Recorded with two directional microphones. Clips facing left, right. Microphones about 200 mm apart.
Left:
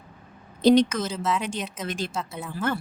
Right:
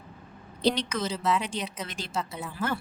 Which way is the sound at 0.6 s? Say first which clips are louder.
Left 8 dB; 45° left (ahead or behind).